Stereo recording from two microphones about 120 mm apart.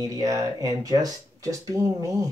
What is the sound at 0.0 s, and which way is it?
Speech, 30° right (ahead or behind).